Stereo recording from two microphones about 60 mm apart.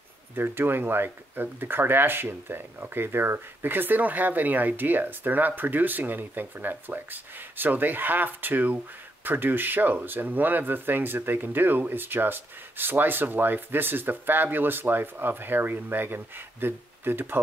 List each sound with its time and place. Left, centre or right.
0.4 s speech: right